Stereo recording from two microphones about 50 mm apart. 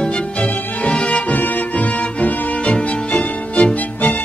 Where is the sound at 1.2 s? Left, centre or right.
Left.